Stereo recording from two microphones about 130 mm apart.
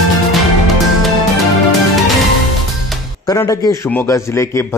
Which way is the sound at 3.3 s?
25° left (ahead or behind).